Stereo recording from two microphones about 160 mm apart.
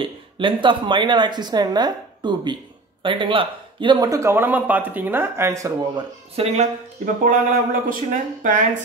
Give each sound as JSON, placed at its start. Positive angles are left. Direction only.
{"t": 0.0, "sound": "a woman's voice", "side_deg": -30}
{"t": 6.3, "sound": "speech", "side_deg": -40}
{"t": 7.2, "sound": "speech", "side_deg": -55}